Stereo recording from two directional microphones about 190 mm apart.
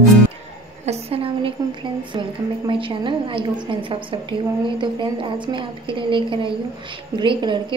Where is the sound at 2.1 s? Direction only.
25° right (ahead or behind).